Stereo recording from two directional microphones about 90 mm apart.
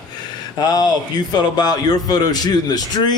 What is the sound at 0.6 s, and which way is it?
A man's voice, 50° left (ahead or behind).